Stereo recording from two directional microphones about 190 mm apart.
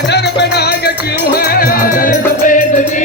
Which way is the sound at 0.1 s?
60° left (ahead or behind).